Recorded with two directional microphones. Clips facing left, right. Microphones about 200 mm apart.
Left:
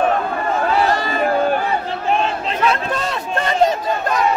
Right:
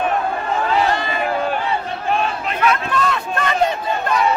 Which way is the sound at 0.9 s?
40° left (ahead or behind).